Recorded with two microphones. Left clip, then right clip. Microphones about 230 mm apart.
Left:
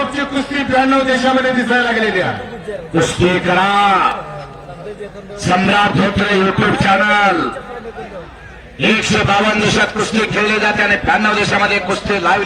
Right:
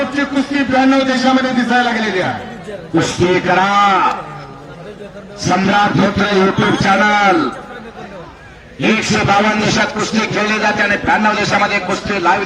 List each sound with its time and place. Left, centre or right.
0.2 s a man's voice: left
5.8 s a man's voice: left
8.8 s a man's voice: left